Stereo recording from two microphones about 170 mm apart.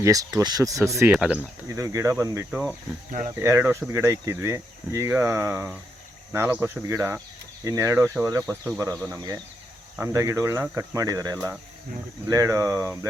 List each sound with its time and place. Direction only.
0.0 s speech: 20° right (ahead or behind)
1.1 s speech: 5° right (ahead or behind)
1.8 s speech: 15° right (ahead or behind)
2.5 s speech: 5° right (ahead or behind)
3.1 s speech: 50° right (ahead or behind)
3.4 s speech: 15° right (ahead or behind)